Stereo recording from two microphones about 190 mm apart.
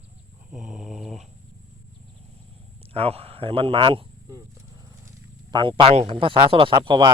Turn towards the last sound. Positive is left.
turn(degrees=-25)  # may be behind; listen again after turning